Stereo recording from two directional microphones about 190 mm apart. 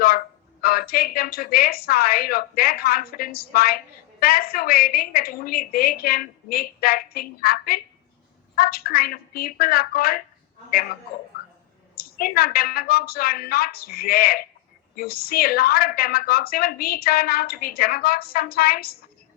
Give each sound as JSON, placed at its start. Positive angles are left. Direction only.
{"t": 0.6, "sound": "a woman's voice", "side_deg": 50}
{"t": 11.9, "sound": "a woman's voice", "side_deg": 50}